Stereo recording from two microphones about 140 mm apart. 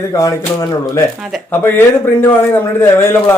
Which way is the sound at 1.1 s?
5° right (ahead or behind).